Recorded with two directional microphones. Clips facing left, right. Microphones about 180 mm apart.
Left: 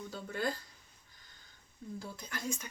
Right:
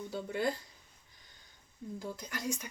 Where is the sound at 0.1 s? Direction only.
20° right (ahead or behind).